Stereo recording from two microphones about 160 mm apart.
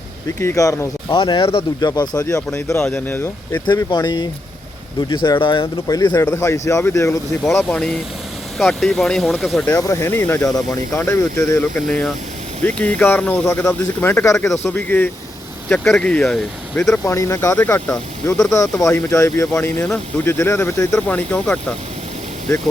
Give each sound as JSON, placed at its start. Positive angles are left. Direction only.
{"t": 0.3, "sound": "speech", "side_deg": 20}
{"t": 1.9, "sound": "speech", "side_deg": 25}
{"t": 2.5, "sound": "speech", "side_deg": 10}
{"t": 3.7, "sound": "speech", "side_deg": 25}
{"t": 7.4, "sound": "speech", "side_deg": 5}
{"t": 9.7, "sound": "speech", "side_deg": 20}
{"t": 11.9, "sound": "speech", "side_deg": 5}
{"t": 14.3, "sound": "speech", "side_deg": 0}
{"t": 14.6, "sound": "speech", "side_deg": 10}
{"t": 17.0, "sound": "speech", "side_deg": 20}